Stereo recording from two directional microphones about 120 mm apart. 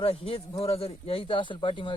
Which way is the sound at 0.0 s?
50° left (ahead or behind).